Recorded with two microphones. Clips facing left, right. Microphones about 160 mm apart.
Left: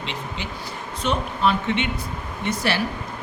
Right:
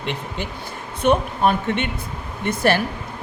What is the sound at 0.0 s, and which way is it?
Speech, 55° right (ahead or behind).